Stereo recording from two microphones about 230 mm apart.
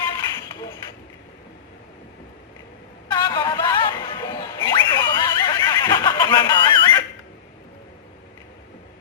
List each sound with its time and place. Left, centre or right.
3.1 s music: centre